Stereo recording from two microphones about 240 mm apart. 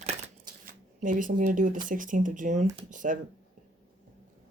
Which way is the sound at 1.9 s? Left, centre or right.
Right.